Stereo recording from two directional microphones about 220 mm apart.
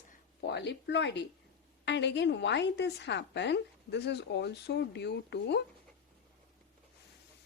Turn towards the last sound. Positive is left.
turn(degrees=50)  # may be behind; listen again after turning